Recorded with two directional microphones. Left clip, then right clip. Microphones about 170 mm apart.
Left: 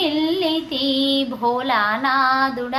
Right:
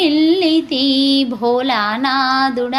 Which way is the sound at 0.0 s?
40° right (ahead or behind).